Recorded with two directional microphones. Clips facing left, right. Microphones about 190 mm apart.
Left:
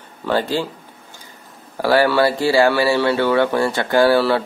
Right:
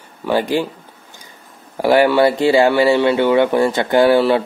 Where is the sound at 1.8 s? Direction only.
20° right (ahead or behind).